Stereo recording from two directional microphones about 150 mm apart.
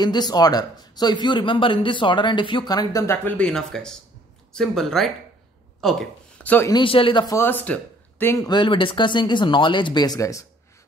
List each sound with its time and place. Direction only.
0.0 s speech: 30° left (ahead or behind)
3.3 s speech: 5° left (ahead or behind)
6.7 s speech: 35° left (ahead or behind)
7.2 s speech: 15° left (ahead or behind)
8.5 s speech: 30° left (ahead or behind)